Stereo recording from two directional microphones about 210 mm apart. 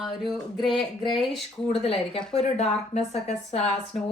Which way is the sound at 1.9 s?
30° left (ahead or behind).